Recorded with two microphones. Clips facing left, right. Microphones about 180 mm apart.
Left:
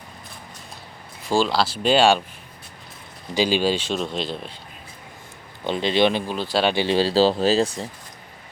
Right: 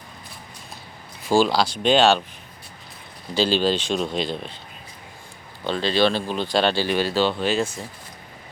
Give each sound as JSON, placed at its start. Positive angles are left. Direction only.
{"t": 1.3, "sound": "speech", "side_deg": 0}
{"t": 3.3, "sound": "speech", "side_deg": 10}
{"t": 5.6, "sound": "speech", "side_deg": 20}
{"t": 6.3, "sound": "speech", "side_deg": 5}
{"t": 6.7, "sound": "speech", "side_deg": 25}